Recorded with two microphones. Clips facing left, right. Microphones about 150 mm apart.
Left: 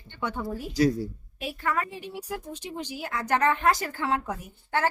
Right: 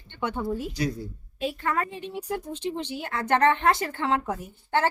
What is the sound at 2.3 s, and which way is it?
Speech, 10° left (ahead or behind).